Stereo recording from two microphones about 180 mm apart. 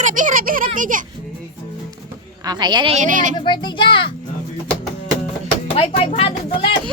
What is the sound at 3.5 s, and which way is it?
Speech, 25° left (ahead or behind).